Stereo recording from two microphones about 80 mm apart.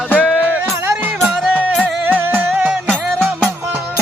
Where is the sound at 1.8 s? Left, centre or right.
Right.